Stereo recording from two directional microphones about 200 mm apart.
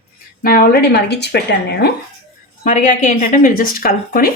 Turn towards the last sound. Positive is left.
turn(degrees=45)  # may be behind; listen again after turning